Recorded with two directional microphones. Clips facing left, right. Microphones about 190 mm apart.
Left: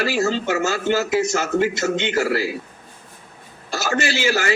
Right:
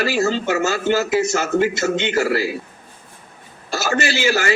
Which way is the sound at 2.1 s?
65° right (ahead or behind).